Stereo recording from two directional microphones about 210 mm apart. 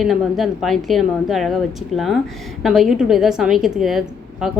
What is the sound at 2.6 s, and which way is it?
Speech, centre (ahead or behind).